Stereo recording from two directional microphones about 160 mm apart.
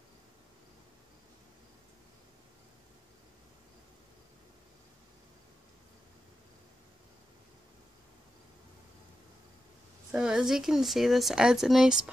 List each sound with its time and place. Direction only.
10.1 s speech: 5° right (ahead or behind)